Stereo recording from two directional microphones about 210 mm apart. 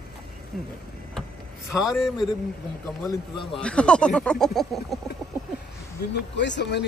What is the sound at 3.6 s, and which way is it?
Speech, 5° left (ahead or behind).